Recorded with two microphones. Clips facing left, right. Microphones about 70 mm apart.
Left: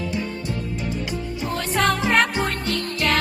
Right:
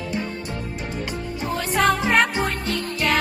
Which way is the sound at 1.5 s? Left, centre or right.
Centre.